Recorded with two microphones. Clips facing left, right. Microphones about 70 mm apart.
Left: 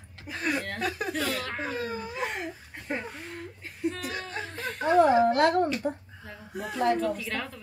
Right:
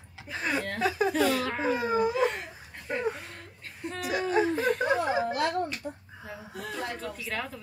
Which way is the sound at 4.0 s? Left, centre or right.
Centre.